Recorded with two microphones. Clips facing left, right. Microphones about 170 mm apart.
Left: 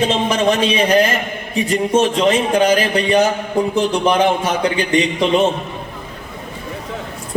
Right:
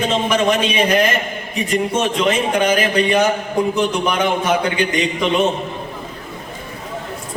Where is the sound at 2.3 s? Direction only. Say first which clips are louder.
Left 3 dB; 35° left (ahead or behind).